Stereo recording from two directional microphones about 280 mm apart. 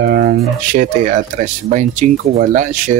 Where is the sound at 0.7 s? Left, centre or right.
Right.